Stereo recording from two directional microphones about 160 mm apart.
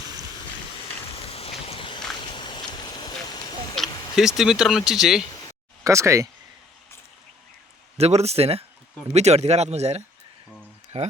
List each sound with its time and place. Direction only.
1.1 s a sound: 40° left (ahead or behind)
3.8 s vehicle: centre (ahead or behind)
4.1 s speech: centre (ahead or behind)
5.2 s a sound: 25° left (ahead or behind)
5.8 s speech: 20° right (ahead or behind)
7.9 s speech: 40° right (ahead or behind)